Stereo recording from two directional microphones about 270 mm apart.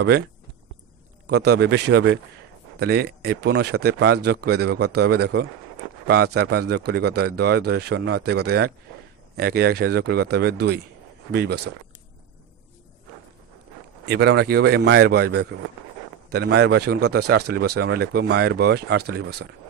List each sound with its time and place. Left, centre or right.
1.3 s speech: right
14.0 s speech: right